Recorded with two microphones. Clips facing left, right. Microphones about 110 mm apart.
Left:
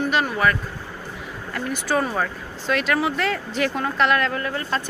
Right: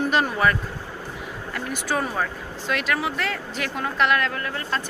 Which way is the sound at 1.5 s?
5° right (ahead or behind).